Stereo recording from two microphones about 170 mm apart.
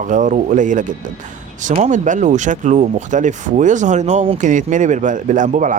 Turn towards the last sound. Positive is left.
turn(degrees=-50)  # may be behind; listen again after turning